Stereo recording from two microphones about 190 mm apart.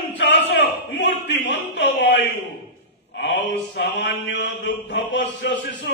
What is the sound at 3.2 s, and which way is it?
Mantra, 70° left (ahead or behind).